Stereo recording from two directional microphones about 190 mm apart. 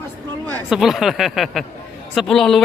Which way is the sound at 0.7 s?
Centre (ahead or behind).